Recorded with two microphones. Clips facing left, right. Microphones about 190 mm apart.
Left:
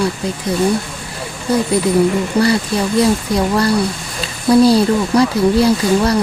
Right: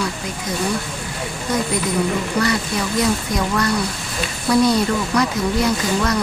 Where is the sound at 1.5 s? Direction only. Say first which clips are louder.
Left 7 dB; 30° left (ahead or behind).